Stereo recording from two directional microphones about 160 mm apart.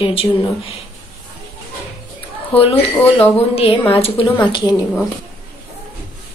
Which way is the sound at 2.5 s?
35° left (ahead or behind).